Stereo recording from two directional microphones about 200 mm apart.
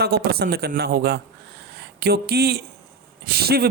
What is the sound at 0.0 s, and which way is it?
Speech, 50° right (ahead or behind).